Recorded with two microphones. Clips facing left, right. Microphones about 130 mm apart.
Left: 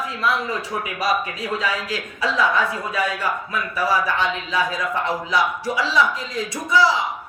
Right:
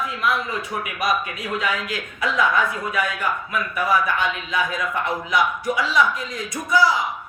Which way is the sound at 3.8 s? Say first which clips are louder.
Even; 30° left (ahead or behind).